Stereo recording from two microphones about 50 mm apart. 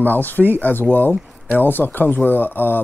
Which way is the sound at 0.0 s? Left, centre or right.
Left.